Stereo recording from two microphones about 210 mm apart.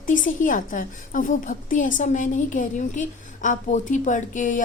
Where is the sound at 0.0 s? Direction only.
40° left (ahead or behind).